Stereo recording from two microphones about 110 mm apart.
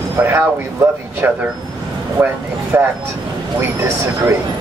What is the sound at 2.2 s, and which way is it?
Speech, 15° right (ahead or behind).